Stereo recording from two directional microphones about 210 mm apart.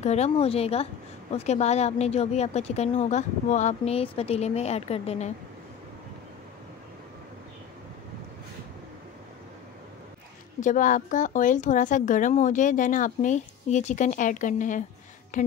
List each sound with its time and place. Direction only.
0.0 s a woman's voice: 30° left (ahead or behind)
10.6 s speech: 40° left (ahead or behind)